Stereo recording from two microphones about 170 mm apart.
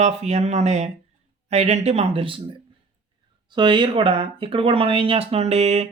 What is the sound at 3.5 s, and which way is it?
Speech, 25° right (ahead or behind).